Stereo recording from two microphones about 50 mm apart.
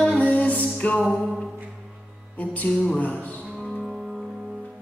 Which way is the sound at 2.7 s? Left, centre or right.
Centre.